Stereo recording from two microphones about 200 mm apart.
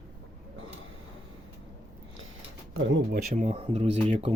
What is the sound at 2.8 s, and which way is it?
Speech, 60° right (ahead or behind).